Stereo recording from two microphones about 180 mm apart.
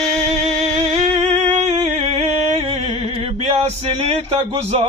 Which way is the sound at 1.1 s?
35° right (ahead or behind).